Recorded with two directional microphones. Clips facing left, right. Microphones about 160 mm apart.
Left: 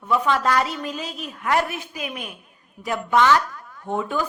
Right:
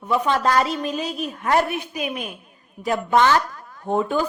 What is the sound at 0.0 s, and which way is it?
A woman's voice, 20° right (ahead or behind).